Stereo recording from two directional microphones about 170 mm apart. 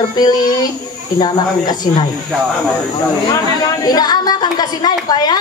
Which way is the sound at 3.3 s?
20° left (ahead or behind).